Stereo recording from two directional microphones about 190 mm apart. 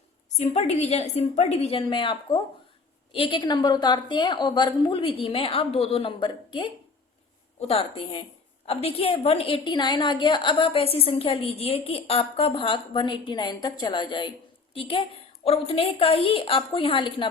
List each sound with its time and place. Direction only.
0.3 s a woman's voice: 35° left (ahead or behind)